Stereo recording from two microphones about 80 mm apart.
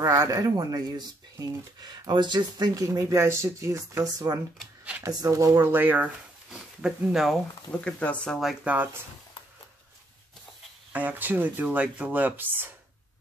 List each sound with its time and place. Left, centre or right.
0.0 s speech: right
1.8 s speech: right
5.6 s speech: right
6.5 s speech: centre
7.8 s speech: centre
8.6 s speech: right
10.9 s speech: right